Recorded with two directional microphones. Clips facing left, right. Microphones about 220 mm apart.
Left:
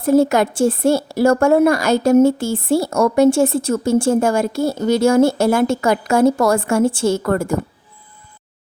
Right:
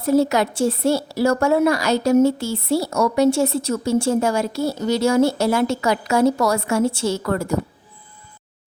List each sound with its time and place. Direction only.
0.0 s a woman's voice: 50° left (ahead or behind)